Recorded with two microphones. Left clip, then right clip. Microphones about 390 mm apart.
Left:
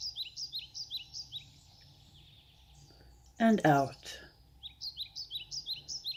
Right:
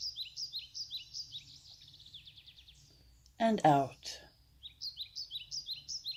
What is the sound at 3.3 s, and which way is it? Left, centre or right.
Speech, right.